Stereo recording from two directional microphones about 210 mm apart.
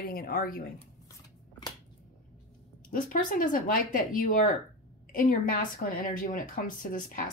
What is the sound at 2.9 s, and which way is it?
Speech, 40° left (ahead or behind).